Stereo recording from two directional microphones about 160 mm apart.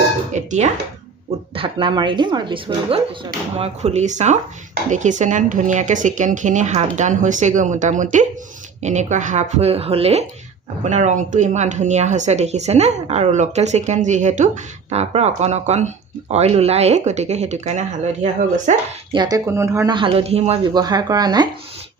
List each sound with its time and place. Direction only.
0.3 s speech: 50° right (ahead or behind)
1.5 s speech: 30° right (ahead or behind)
3.5 s a woman's voice: 40° right (ahead or behind)
19.1 s speech: 25° right (ahead or behind)
20.0 s a man's voice: 35° right (ahead or behind)
20.7 s speech: 25° right (ahead or behind)